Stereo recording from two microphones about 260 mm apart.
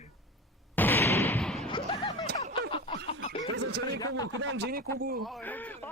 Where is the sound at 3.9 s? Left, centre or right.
Centre.